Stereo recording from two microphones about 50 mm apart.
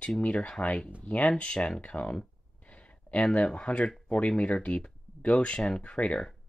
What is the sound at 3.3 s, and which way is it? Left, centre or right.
Speech, left.